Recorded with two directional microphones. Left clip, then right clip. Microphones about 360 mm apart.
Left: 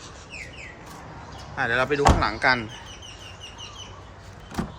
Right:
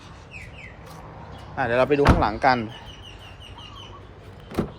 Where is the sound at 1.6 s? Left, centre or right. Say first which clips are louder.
Right 3 dB; centre.